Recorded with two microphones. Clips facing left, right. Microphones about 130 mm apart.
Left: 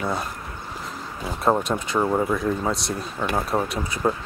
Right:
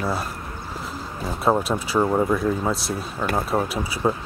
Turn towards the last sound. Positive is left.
turn(degrees=-5)  # may be behind; listen again after turning